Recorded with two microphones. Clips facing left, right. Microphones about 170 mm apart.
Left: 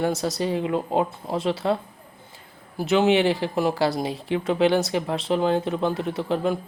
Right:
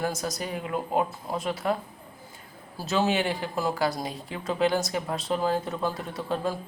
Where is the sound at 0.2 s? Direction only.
30° left (ahead or behind).